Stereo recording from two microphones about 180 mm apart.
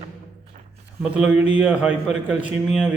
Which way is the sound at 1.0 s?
5° right (ahead or behind).